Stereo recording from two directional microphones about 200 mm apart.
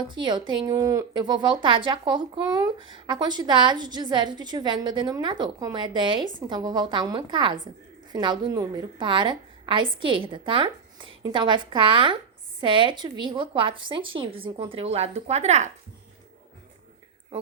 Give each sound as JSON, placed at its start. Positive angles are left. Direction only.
{"t": 0.1, "sound": "speech", "side_deg": -25}